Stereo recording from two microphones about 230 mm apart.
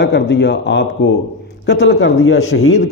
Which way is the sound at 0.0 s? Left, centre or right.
Left.